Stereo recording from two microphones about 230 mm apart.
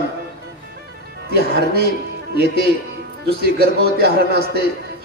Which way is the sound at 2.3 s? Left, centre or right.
Right.